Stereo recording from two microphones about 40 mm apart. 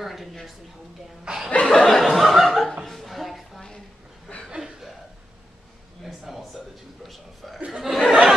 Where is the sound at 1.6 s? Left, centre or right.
Centre.